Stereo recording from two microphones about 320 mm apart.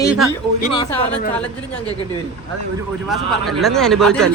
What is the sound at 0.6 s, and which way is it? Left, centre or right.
Speech, centre.